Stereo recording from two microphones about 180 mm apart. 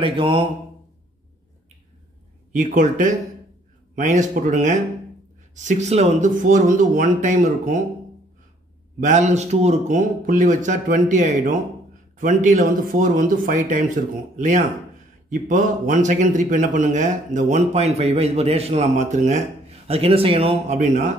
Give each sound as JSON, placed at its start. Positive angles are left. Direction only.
{"t": 0.0, "sound": "mantra", "side_deg": -30}
{"t": 2.5, "sound": "a man's voice", "side_deg": -45}
{"t": 9.0, "sound": "a man's voice", "side_deg": -40}
{"t": 19.9, "sound": "speech", "side_deg": -30}